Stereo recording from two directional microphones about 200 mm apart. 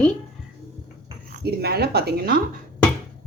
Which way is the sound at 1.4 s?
55° right (ahead or behind).